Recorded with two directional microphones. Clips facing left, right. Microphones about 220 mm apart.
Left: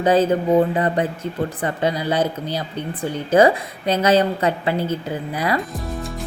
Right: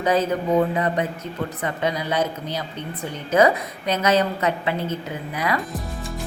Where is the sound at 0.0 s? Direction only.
30° left (ahead or behind).